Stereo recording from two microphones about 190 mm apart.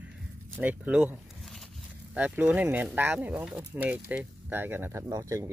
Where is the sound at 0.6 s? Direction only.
5° right (ahead or behind).